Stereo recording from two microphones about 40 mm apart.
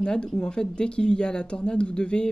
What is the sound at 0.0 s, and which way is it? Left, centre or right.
Speech, left.